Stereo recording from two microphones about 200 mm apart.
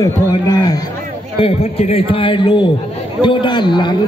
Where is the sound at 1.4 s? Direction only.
30° left (ahead or behind).